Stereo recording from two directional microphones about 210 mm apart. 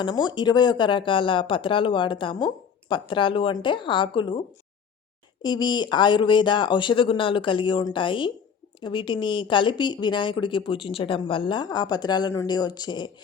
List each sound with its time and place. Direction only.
0.0 s a woman's voice: 20° left (ahead or behind)